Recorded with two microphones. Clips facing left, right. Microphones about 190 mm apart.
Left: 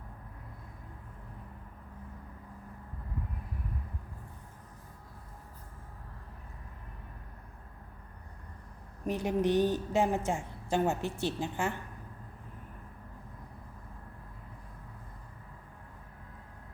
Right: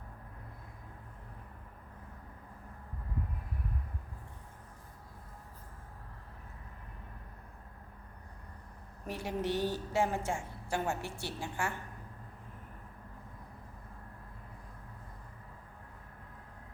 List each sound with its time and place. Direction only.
9.0 s a woman's voice: 20° left (ahead or behind)